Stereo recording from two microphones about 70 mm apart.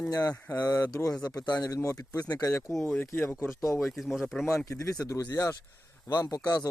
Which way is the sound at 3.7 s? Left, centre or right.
Centre.